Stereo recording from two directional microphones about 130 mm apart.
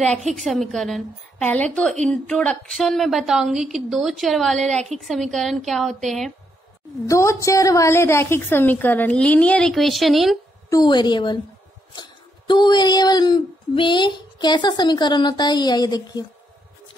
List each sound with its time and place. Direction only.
0.3 s a woman's voice: centre (ahead or behind)
7.1 s a woman's voice: 25° left (ahead or behind); by 10.4 s centre (ahead or behind)
10.7 s speech: 35° left (ahead or behind)